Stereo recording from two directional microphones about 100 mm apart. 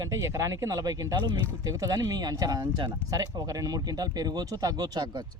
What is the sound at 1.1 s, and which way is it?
Speech, 55° right (ahead or behind).